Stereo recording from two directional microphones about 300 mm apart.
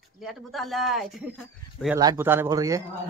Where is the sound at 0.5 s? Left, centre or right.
Centre.